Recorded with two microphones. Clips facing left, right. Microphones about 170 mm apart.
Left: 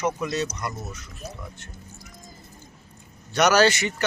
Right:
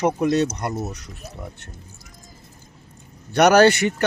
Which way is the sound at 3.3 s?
55° right (ahead or behind).